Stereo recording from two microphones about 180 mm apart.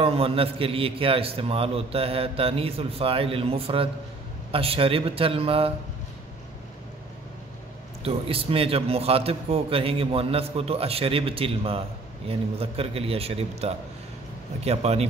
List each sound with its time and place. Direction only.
0.0 s a man's voice: 30° right (ahead or behind)
8.0 s a man's voice: 30° right (ahead or behind)